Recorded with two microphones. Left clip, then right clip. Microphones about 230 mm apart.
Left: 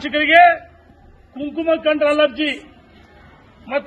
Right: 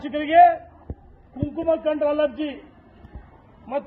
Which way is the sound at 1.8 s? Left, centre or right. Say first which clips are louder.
Left 6 dB; left.